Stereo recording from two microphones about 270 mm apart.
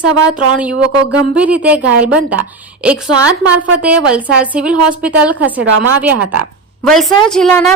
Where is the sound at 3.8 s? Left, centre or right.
Centre.